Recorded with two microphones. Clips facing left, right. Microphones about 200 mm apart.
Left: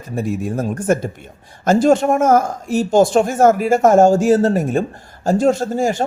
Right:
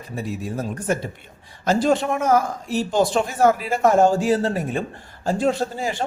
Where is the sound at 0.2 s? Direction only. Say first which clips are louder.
Left 7 dB; 50° left (ahead or behind).